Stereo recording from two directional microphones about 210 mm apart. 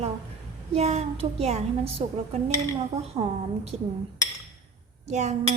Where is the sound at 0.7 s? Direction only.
30° right (ahead or behind).